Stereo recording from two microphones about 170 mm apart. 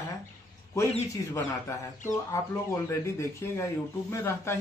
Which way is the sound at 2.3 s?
15° left (ahead or behind).